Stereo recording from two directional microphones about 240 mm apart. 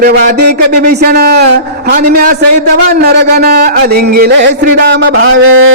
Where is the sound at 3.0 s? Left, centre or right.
Right.